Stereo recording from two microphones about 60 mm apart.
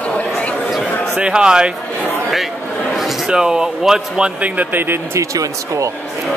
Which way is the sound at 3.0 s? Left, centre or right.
Centre.